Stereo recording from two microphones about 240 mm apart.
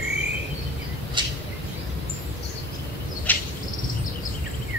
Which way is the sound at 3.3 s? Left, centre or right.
Centre.